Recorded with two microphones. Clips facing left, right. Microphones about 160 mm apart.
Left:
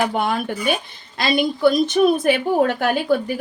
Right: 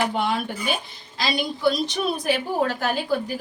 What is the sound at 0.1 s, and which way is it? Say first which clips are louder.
A woman's voice: left 3 dB; 50° left (ahead or behind).